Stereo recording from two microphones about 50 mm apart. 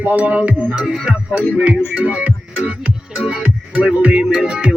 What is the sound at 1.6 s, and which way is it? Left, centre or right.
Music, right.